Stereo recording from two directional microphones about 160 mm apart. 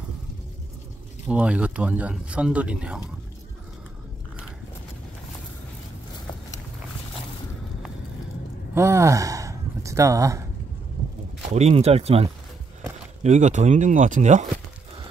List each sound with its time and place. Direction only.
1.2 s speech: 5° right (ahead or behind)
8.7 s speech: 15° right (ahead or behind)
11.5 s speech: 40° right (ahead or behind)